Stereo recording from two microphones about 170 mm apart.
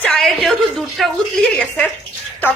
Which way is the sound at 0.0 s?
Centre (ahead or behind).